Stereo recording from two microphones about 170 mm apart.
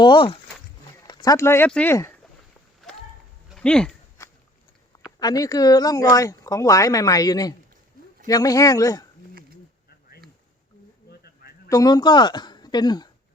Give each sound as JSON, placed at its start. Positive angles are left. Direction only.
{"t": 0.0, "sound": "speech", "side_deg": 30}
{"t": 3.5, "sound": "speech", "side_deg": 5}
{"t": 5.0, "sound": "speech", "side_deg": 20}
{"t": 11.7, "sound": "a woman's voice", "side_deg": 20}